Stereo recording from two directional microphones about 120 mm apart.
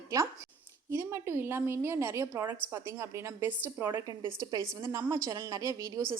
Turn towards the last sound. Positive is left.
turn(degrees=-25)  # may be behind; listen again after turning